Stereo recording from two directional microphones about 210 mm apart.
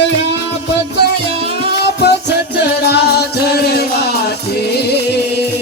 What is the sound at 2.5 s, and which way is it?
Music, 50° left (ahead or behind).